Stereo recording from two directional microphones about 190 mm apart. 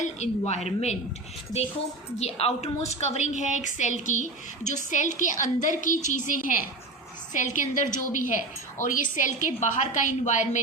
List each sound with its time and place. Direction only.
0.0 s a woman's voice: 35° left (ahead or behind)
2.1 s a woman's voice: 35° left (ahead or behind)